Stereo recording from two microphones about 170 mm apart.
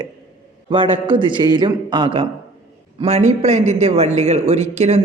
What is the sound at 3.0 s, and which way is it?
A man's voice, 40° right (ahead or behind).